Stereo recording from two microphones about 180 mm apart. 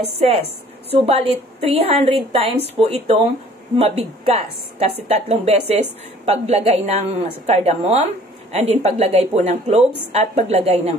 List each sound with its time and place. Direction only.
0.2 s a woman's voice: 35° right (ahead or behind)